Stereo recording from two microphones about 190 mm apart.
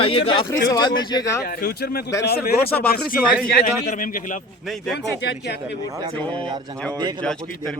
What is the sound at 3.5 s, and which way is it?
Speech, 45° left (ahead or behind).